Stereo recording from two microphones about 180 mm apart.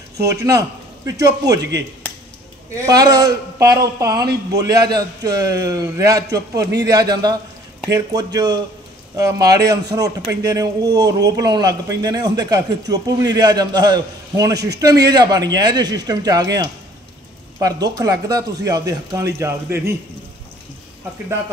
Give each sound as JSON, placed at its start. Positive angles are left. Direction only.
{"t": 0.2, "sound": "a man's voice", "side_deg": -15}
{"t": 2.7, "sound": "a man's voice", "side_deg": -20}